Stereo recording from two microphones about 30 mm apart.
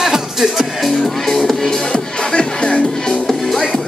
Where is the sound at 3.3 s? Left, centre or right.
Centre.